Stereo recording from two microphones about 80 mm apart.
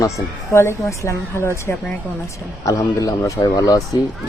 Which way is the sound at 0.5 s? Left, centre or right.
Left.